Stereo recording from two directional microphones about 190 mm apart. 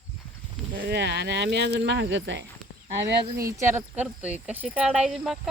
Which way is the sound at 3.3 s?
15° right (ahead or behind).